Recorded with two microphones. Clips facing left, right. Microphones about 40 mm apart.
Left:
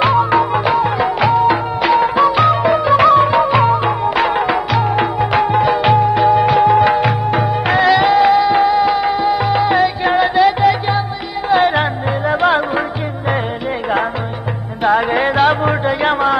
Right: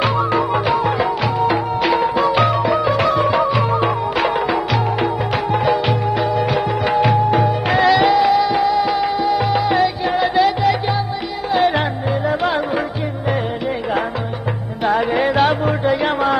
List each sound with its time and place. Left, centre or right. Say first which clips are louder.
0.0 s music: left 4 dB; centre
5.4 s music: left 3 dB; centre
6.2 s music: left 7 dB; left
8.5 s music: left 4 dB; left
8.9 s music: left 2 dB; centre
14.8 s music: left 4 dB; centre
15.0 s music: left 2 dB; left
15.8 s music: left 2 dB; centre